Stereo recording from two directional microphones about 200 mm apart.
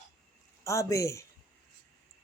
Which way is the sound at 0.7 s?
15° left (ahead or behind).